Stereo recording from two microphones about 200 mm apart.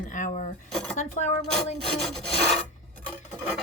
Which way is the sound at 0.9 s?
35° left (ahead or behind).